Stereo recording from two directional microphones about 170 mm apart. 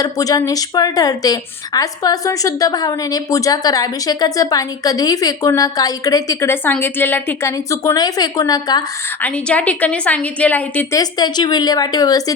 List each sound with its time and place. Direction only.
0.0 s a woman's voice: 20° left (ahead or behind)
9.2 s a woman's voice: 10° left (ahead or behind)
10.9 s a woman's voice: 25° left (ahead or behind)